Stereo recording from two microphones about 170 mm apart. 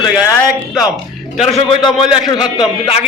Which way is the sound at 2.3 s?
25° left (ahead or behind).